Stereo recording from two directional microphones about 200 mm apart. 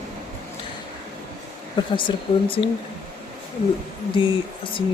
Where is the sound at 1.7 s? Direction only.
25° left (ahead or behind).